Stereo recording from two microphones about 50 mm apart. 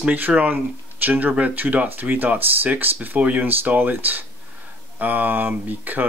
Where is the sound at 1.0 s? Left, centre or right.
Right.